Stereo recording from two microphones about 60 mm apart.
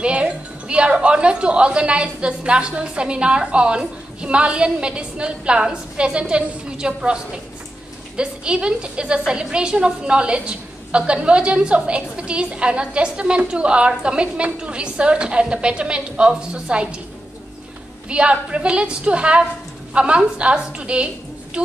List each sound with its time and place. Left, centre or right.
0.0 s a woman's voice: centre
8.2 s a woman's voice: centre
18.0 s a woman's voice: centre